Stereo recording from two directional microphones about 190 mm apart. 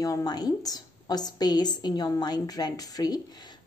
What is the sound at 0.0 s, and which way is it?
A woman's voice, 20° left (ahead or behind).